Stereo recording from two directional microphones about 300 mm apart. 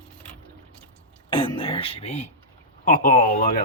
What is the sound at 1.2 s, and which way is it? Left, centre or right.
Speech, centre.